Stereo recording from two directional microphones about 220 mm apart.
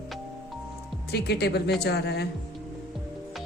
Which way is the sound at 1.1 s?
50° left (ahead or behind).